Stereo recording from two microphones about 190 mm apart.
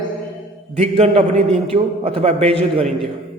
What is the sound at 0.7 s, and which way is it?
A man's voice, 35° right (ahead or behind).